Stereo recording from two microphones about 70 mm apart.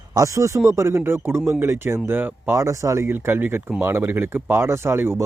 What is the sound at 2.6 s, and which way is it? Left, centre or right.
Speech, right.